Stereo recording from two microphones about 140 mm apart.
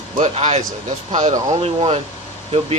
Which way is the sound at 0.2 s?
50° right (ahead or behind).